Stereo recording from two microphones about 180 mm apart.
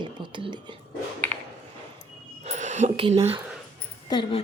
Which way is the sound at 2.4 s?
40° right (ahead or behind).